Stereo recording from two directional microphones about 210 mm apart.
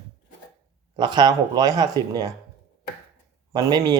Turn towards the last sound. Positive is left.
turn(degrees=-15)  # may be behind; listen again after turning